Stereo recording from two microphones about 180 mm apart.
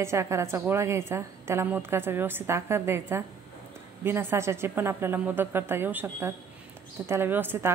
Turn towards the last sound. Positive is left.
turn(degrees=-10)  # may be behind; listen again after turning